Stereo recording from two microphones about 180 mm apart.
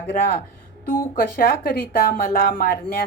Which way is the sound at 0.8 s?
55° left (ahead or behind).